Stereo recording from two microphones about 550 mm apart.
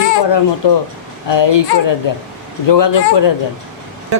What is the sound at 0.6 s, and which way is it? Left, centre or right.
Speech, left.